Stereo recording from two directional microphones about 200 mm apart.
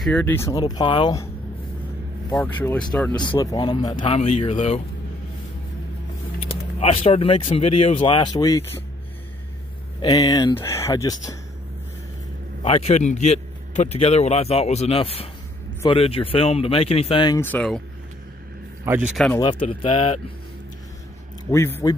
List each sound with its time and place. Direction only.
0.0 s speech: 5° left (ahead or behind)
2.3 s speech: 10° left (ahead or behind)
3.2 s a man's voice: 20° left (ahead or behind)
6.4 s speech: 30° left (ahead or behind)
10.0 s speech: 20° left (ahead or behind)
12.6 s a man's voice: 30° left (ahead or behind)
17.4 s speech: 5° left (ahead or behind)
18.9 s speech: 10° right (ahead or behind)
19.4 s speech: 25° left (ahead or behind)
21.5 s speech: 10° left (ahead or behind)